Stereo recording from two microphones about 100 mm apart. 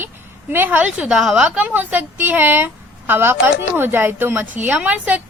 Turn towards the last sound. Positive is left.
turn(degrees=-15)  # may be behind; listen again after turning